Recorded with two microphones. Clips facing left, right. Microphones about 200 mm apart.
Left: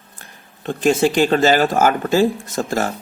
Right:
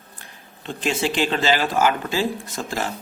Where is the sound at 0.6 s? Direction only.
45° left (ahead or behind).